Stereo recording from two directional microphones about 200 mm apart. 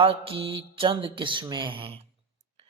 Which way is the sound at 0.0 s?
30° right (ahead or behind).